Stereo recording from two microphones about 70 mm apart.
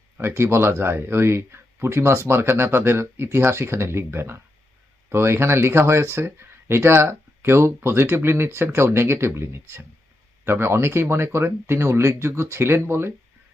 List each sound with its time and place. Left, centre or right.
0.2 s speech: right